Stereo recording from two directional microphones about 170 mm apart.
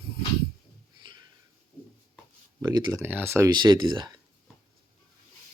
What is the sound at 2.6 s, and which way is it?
Speech, 25° right (ahead or behind).